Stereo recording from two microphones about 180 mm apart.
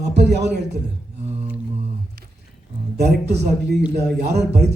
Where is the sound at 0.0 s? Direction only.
70° right (ahead or behind).